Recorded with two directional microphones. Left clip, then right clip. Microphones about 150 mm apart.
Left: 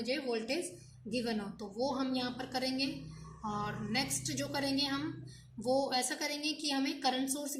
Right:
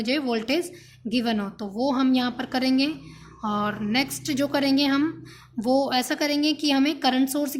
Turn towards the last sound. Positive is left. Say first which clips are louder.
# right 11 dB
turn(degrees=-55)  # may be behind; listen again after turning